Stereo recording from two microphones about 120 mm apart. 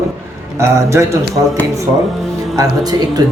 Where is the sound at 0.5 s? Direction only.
25° right (ahead or behind).